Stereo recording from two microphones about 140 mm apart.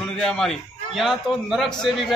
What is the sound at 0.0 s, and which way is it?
A man's voice, 5° left (ahead or behind).